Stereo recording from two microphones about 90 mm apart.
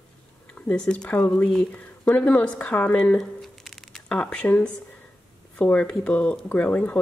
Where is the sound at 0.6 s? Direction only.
10° left (ahead or behind).